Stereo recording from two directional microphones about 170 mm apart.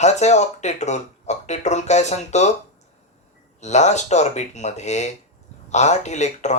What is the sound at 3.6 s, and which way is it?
Speech, 40° left (ahead or behind).